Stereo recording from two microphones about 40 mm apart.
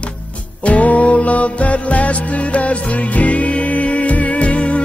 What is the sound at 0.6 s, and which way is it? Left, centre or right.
Music, left.